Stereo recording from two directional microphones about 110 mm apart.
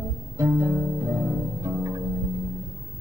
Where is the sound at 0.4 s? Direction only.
25° right (ahead or behind).